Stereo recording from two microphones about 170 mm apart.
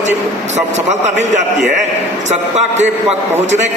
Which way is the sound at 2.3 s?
40° right (ahead or behind).